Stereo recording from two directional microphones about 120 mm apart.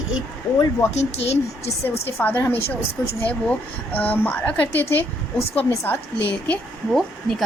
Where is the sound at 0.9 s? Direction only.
60° left (ahead or behind).